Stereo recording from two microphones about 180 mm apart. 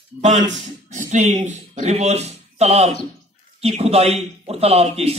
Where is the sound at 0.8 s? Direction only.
40° right (ahead or behind).